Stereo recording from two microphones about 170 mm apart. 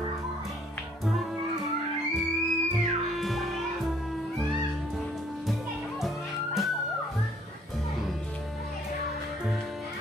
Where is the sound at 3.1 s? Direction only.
Centre (ahead or behind).